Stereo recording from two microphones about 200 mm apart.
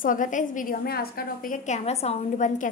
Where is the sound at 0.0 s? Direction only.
40° left (ahead or behind).